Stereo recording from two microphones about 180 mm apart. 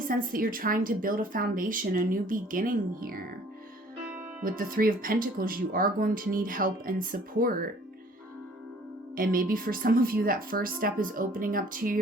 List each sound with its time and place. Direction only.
0.1 s speech: 50° right (ahead or behind)
4.4 s speech: 50° right (ahead or behind)
9.1 s speech: 50° right (ahead or behind)